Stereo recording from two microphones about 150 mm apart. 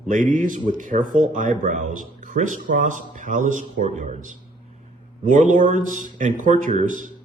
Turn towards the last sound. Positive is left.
turn(degrees=-55)  # may be behind; listen again after turning